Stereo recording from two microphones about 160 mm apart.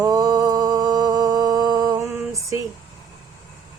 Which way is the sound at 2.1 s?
20° right (ahead or behind).